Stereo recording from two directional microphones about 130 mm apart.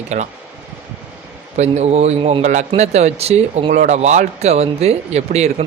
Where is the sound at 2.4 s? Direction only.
65° right (ahead or behind).